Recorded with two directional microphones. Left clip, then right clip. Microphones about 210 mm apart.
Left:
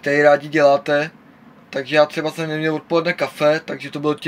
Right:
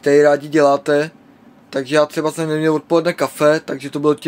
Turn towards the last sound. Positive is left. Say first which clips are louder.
# right 5 dB
turn(degrees=-25)  # may be behind; listen again after turning